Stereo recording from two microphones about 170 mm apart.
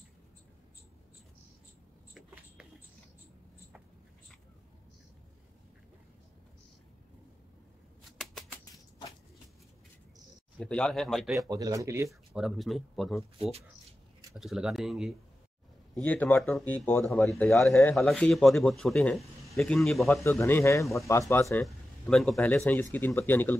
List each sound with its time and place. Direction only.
8.2 s a sound: centre (ahead or behind)
10.6 s speech: 5° left (ahead or behind)
11.4 s speech: 20° right (ahead or behind)
12.4 s speech: centre (ahead or behind)
14.3 s speech: centre (ahead or behind)
15.9 s speech: 10° left (ahead or behind)
20.2 s speech: 15° left (ahead or behind)
21.6 s speech: centre (ahead or behind)